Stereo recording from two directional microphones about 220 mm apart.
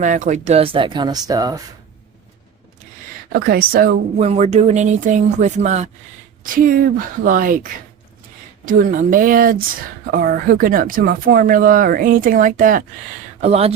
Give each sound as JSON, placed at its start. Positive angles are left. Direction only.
{"t": 0.0, "sound": "speech", "side_deg": -35}
{"t": 3.4, "sound": "speech", "side_deg": -45}
{"t": 4.2, "sound": "speech", "side_deg": -30}
{"t": 13.4, "sound": "speech", "side_deg": -25}